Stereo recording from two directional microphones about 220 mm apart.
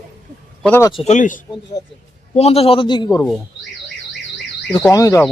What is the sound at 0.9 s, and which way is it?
A man's voice, 25° left (ahead or behind).